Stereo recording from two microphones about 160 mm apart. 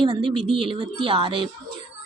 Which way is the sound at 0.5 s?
30° right (ahead or behind).